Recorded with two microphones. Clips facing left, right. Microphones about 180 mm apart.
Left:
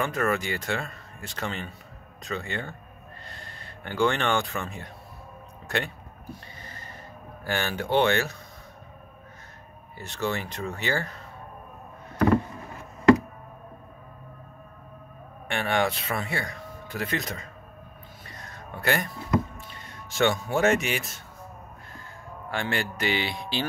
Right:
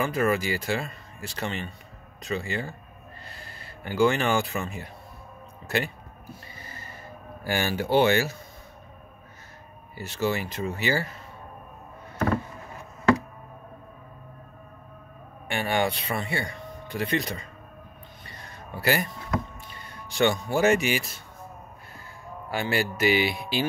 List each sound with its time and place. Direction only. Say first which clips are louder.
0.0 s speech: right 2 dB; centre (ahead or behind)
6.6 s music: even; 10° right (ahead or behind)
7.4 s speech: right 2 dB; 10° right (ahead or behind)
9.9 s speech: right 2 dB; 5° right (ahead or behind)
15.4 s speech: even; centre (ahead or behind)
18.2 s a sound: left 1 dB; centre (ahead or behind)
19.7 s speech: right 1 dB; centre (ahead or behind)
22.5 s speech: right 3 dB; 5° right (ahead or behind)